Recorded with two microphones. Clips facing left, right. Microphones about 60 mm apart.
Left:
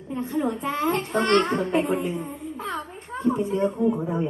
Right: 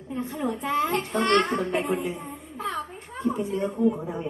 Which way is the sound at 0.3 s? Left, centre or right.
Left.